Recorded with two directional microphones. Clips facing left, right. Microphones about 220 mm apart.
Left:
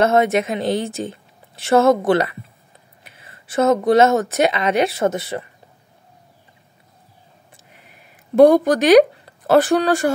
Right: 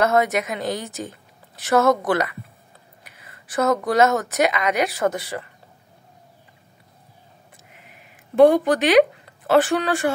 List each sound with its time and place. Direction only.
0.0 s a woman's voice: 25° left (ahead or behind)
8.4 s speech: 40° left (ahead or behind)